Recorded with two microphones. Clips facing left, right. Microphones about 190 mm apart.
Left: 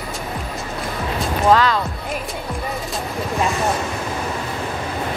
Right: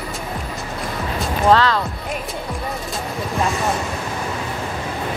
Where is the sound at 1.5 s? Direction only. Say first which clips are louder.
Even; 10° left (ahead or behind).